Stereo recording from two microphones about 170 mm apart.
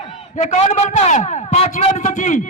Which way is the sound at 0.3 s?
40° left (ahead or behind).